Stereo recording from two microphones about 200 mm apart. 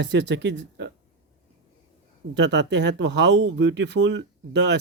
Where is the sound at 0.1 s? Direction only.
60° right (ahead or behind).